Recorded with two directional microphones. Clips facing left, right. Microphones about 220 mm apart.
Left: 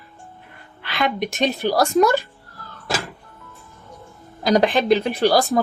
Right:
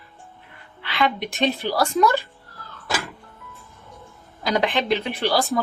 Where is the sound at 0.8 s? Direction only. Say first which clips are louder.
Left 1 dB; 45° left (ahead or behind).